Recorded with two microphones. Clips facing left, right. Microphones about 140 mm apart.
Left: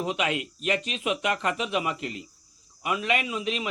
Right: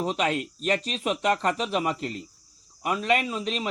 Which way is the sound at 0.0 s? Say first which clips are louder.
Right 2 dB; 35° right (ahead or behind).